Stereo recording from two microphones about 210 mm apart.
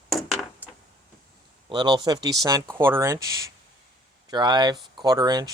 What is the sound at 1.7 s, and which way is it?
Speech, 20° right (ahead or behind).